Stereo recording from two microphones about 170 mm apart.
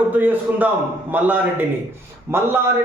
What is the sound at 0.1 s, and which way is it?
A man's voice, 10° right (ahead or behind).